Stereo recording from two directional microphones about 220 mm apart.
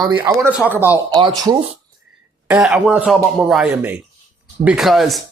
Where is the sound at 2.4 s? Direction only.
5° right (ahead or behind).